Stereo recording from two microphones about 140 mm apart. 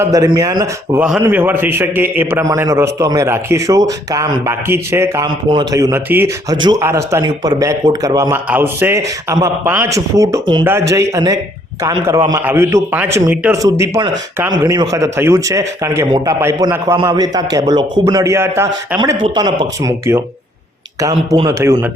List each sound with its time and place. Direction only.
0.0 s a man's voice: 25° right (ahead or behind)
0.9 s a man's voice: 5° right (ahead or behind)
5.2 s a man's voice: 30° right (ahead or behind)
6.5 s a man's voice: 30° right (ahead or behind)
8.4 s a man's voice: 15° right (ahead or behind)
10.4 s speech: 35° right (ahead or behind)
10.7 s a man's voice: 20° right (ahead or behind)
13.3 s a man's voice: 10° right (ahead or behind)
13.6 s a man's voice: 20° right (ahead or behind)
18.9 s a man's voice: 35° right (ahead or behind)